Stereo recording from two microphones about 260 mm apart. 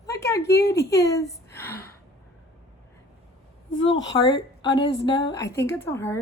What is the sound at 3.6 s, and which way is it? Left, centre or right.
Speech, left.